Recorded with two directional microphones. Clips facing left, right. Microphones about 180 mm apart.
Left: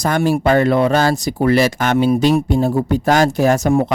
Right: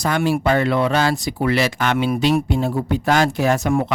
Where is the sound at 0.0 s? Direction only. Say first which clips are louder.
Left 3 dB; 45° left (ahead or behind).